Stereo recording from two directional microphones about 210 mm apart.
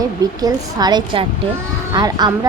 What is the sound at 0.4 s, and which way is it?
A woman's voice, 20° right (ahead or behind).